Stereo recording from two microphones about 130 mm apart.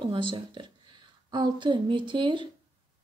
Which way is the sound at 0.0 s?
40° right (ahead or behind).